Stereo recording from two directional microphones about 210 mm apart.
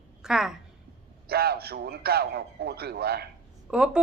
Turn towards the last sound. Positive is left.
turn(degrees=-5)  # may be behind; listen again after turning